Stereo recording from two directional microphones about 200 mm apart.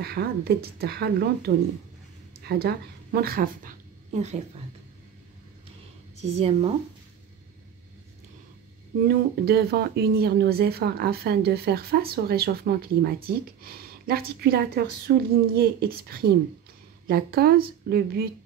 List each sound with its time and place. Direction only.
0.0 s a woman's voice: 50° right (ahead or behind); by 4.4 s 35° right (ahead or behind)
6.2 s speech: 30° right (ahead or behind)
9.0 s speech: 55° right (ahead or behind)